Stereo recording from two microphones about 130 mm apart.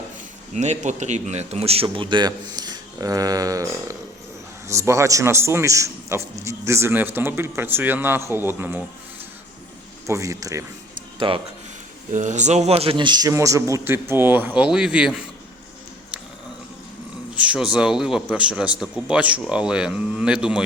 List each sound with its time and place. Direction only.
0.5 s a man's voice: 60° right (ahead or behind); by 8.8 s 15° right (ahead or behind)
10.1 s a man's voice: 25° right (ahead or behind)
11.2 s a man's voice: 40° right (ahead or behind)
12.1 s a man's voice: 70° right (ahead or behind); by 15.2 s 5° right (ahead or behind)
17.3 s a man's voice: 10° right (ahead or behind)